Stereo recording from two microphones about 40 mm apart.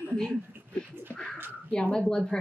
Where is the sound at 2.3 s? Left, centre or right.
Centre.